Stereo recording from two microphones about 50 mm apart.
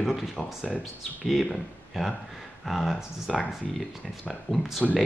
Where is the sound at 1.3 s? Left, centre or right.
Centre.